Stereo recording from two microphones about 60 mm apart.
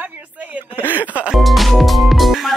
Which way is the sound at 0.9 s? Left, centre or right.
Right.